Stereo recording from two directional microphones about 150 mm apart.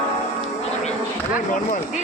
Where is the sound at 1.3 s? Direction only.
60° left (ahead or behind).